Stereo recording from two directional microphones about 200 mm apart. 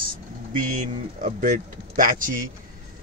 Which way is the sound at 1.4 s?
40° right (ahead or behind).